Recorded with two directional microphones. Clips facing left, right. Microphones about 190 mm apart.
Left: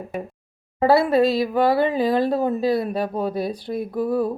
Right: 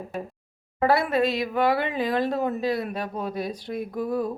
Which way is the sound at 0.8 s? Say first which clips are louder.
Left 5 dB; 30° left (ahead or behind).